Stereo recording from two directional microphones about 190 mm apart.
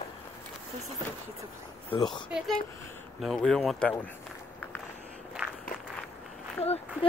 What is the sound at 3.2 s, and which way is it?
Speech, 5° left (ahead or behind).